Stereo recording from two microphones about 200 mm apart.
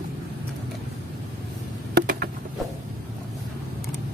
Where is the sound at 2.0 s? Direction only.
50° right (ahead or behind).